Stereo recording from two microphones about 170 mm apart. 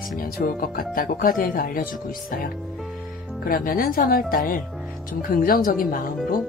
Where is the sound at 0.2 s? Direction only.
55° left (ahead or behind).